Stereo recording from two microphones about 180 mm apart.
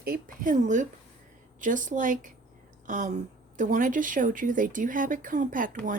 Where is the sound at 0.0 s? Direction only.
55° right (ahead or behind).